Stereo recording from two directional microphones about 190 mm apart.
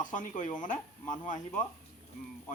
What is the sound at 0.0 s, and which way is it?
Speech, 40° left (ahead or behind).